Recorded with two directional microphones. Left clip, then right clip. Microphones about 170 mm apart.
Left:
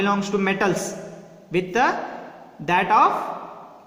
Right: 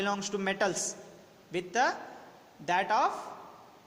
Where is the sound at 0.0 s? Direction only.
35° right (ahead or behind).